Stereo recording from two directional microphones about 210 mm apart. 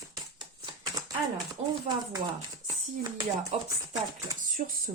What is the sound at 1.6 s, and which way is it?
Speech, 30° right (ahead or behind).